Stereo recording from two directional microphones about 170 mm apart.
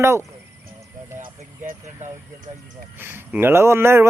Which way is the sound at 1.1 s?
50° right (ahead or behind).